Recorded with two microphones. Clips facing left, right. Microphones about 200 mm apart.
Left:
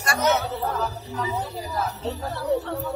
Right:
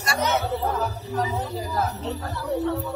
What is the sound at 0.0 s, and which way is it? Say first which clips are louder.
Speech: left 1 dB; 50° left (ahead or behind).